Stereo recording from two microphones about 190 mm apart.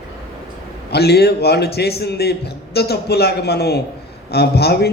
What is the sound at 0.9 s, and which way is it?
A man's voice, 60° left (ahead or behind).